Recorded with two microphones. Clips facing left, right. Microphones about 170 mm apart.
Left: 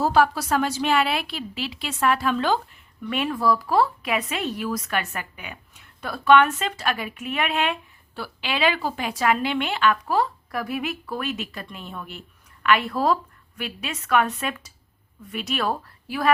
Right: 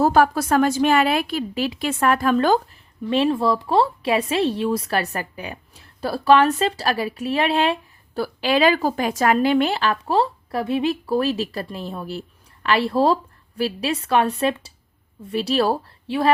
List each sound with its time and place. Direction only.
0.0 s a woman's voice: 50° right (ahead or behind)
3.0 s a woman's voice: 30° right (ahead or behind)